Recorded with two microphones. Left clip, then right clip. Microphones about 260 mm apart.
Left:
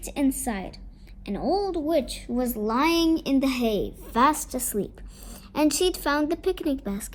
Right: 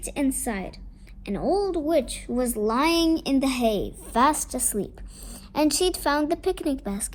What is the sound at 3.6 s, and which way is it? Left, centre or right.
Speech, right.